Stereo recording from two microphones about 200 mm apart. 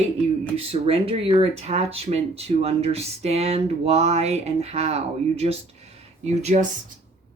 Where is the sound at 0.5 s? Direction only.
30° right (ahead or behind).